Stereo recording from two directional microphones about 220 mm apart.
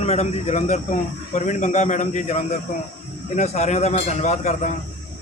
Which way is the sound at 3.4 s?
30° left (ahead or behind).